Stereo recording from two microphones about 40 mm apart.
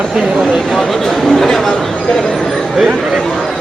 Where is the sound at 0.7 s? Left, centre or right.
Centre.